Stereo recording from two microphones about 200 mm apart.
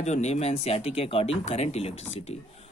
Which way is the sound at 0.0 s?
35° left (ahead or behind).